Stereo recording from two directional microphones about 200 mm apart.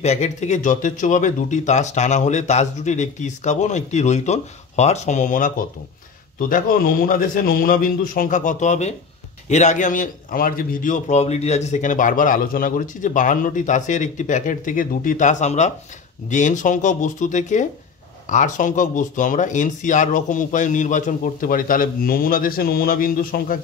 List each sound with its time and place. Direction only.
0.0 s a man's voice: 35° left (ahead or behind)
6.5 s a man's voice: 45° left (ahead or behind)